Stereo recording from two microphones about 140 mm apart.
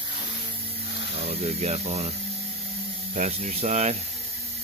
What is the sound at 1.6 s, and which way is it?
Speech, 55° right (ahead or behind).